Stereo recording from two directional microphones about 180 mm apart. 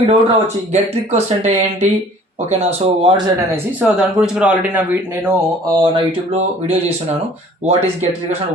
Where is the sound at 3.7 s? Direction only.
5° right (ahead or behind).